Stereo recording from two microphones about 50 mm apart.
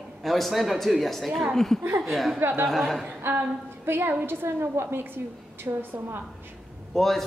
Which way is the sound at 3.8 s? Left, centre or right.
Right.